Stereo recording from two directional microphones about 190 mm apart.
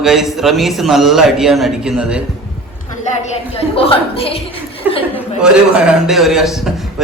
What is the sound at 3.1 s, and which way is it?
A woman's voice, 35° left (ahead or behind).